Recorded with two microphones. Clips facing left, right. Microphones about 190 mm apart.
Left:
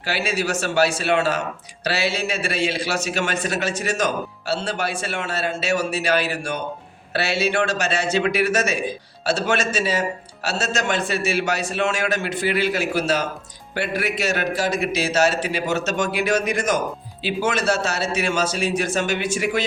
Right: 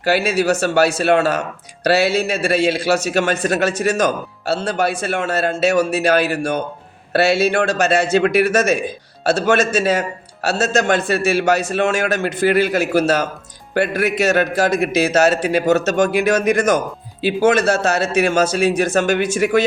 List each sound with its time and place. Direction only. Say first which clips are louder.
0.0 s a man's voice: right 7 dB; 40° right (ahead or behind)